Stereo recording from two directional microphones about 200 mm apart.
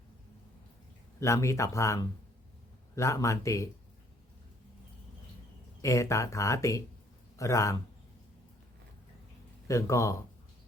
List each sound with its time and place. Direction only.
1.2 s speech: 15° left (ahead or behind)
5.8 s speech: 15° left (ahead or behind)
9.6 s speech: 15° left (ahead or behind)